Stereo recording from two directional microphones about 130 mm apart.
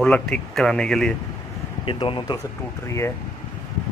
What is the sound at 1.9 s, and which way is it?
Speech, 40° left (ahead or behind).